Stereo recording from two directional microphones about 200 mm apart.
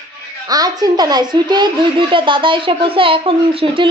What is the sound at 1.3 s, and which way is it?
Speech, 20° right (ahead or behind).